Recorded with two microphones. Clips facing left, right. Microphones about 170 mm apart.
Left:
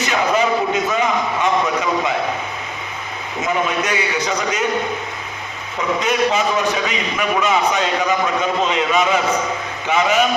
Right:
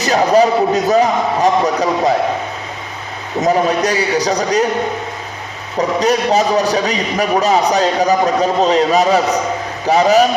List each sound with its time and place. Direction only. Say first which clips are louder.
0.0 s a man's voice: right 6 dB; 40° right (ahead or behind)
3.4 s a man's voice: right 6 dB; 35° right (ahead or behind)
5.7 s a man's voice: right 5 dB; 40° right (ahead or behind)